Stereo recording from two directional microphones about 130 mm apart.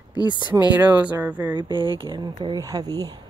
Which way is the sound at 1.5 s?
35° right (ahead or behind).